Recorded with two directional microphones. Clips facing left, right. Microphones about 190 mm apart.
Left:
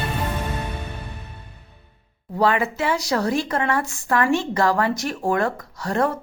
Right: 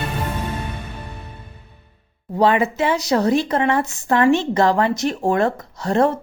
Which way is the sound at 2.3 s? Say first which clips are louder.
Right 3 dB; 20° right (ahead or behind).